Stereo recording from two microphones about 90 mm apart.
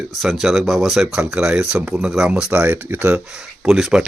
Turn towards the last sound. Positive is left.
turn(degrees=-5)  # may be behind; listen again after turning